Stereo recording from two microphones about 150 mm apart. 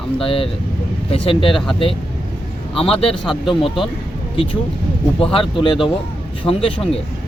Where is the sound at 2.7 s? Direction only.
40° left (ahead or behind).